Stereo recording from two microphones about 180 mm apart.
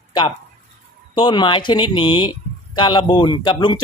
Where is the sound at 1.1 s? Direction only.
25° left (ahead or behind).